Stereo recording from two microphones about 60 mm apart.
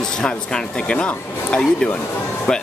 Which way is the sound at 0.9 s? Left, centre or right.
Left.